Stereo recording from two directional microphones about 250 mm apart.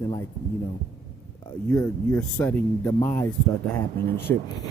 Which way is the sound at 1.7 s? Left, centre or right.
Centre.